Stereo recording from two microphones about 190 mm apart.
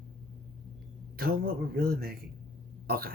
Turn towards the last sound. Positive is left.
turn(degrees=-50)  # may be behind; listen again after turning